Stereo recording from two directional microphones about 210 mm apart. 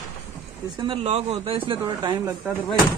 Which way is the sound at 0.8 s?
25° right (ahead or behind).